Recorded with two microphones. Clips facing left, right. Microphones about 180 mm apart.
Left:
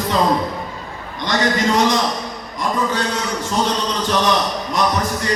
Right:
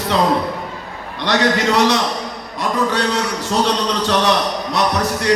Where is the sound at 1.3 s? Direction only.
70° right (ahead or behind).